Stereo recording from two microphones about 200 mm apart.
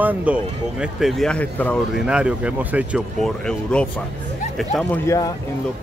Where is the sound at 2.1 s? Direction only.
5° right (ahead or behind).